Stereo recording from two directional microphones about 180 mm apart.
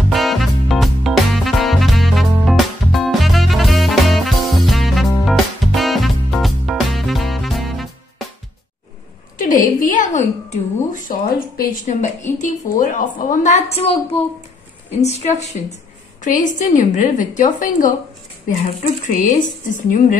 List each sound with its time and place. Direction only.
0.1 s music: centre (ahead or behind)
9.4 s a sound: 45° left (ahead or behind)
12.4 s a woman's voice: 45° left (ahead or behind)
15.0 s a woman's voice: 40° left (ahead or behind)